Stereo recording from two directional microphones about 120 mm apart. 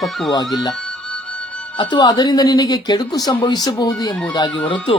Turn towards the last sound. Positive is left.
turn(degrees=40)  # may be behind; listen again after turning